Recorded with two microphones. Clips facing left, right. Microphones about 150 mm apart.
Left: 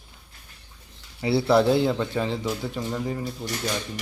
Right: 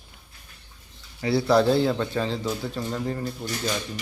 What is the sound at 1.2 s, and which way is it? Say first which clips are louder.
Speech: even; 25° left (ahead or behind).